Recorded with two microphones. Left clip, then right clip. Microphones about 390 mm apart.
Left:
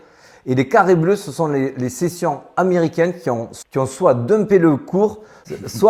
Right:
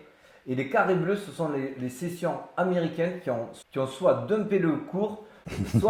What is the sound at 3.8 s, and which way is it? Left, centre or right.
Speech, left.